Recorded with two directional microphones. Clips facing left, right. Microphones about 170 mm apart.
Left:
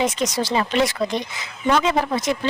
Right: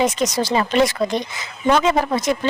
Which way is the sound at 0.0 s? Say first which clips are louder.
Right 3 dB; 45° right (ahead or behind).